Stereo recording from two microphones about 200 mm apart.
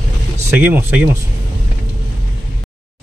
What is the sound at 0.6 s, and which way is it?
Speech, 10° right (ahead or behind).